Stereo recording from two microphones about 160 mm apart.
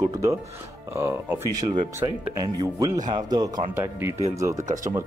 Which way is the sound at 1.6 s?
45° right (ahead or behind).